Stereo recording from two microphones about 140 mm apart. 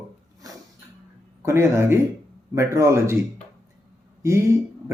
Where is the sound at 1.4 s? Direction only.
20° right (ahead or behind).